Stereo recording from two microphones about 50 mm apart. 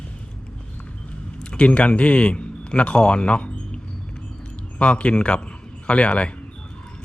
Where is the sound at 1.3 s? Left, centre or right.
Centre.